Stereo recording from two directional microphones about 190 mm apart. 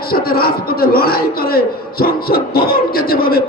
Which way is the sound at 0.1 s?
50° left (ahead or behind).